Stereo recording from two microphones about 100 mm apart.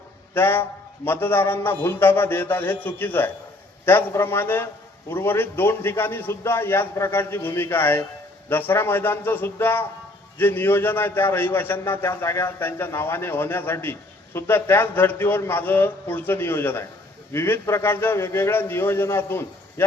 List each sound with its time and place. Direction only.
0.3 s a man's voice: 20° left (ahead or behind)